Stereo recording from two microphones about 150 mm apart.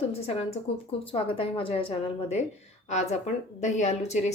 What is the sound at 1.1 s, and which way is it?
A woman's voice, 35° left (ahead or behind).